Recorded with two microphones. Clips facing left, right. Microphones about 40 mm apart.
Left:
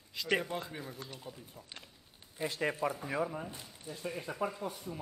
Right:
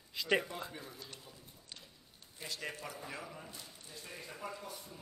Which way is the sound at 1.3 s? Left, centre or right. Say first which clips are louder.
Left 6 dB; left.